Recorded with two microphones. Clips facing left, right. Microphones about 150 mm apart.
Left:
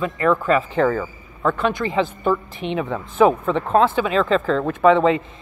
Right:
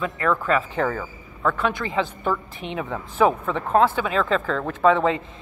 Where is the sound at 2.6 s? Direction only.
70° left (ahead or behind).